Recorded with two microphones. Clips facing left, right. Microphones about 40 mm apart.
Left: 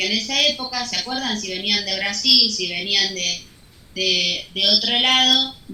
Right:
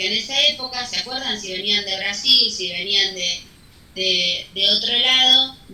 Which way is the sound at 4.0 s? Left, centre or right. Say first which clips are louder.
Even; centre.